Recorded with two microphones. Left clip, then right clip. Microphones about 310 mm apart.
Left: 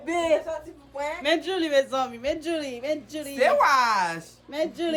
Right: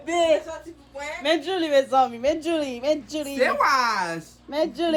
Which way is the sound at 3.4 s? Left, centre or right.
Centre.